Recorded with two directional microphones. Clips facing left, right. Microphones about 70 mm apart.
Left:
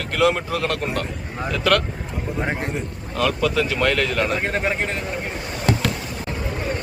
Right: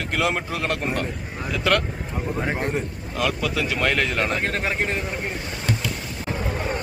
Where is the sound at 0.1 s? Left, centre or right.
Centre.